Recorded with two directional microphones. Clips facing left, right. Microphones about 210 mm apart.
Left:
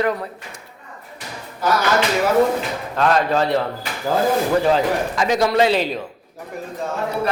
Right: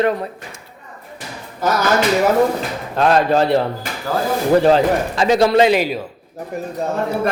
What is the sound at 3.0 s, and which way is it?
Speech, 30° right (ahead or behind).